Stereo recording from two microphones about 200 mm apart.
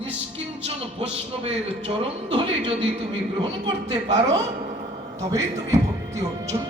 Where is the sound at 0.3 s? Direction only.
30° right (ahead or behind).